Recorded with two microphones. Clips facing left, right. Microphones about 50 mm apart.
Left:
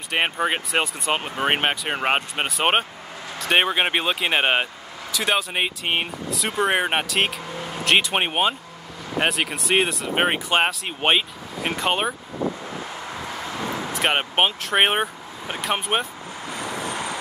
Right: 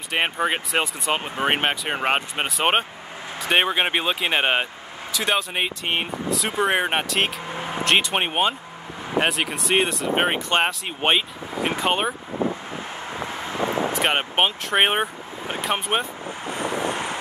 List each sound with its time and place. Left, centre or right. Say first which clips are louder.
0.1 s speech: even; centre
7.4 s vehicle: right 2 dB; right
7.8 s speech: left 1 dB; centre
12.7 s vehicle: right 1 dB; right
13.9 s speech: left 5 dB; centre
16.4 s wind noise: right 4 dB; right